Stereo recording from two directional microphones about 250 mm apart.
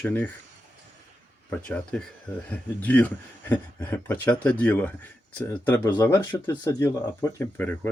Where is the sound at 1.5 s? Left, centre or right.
Centre.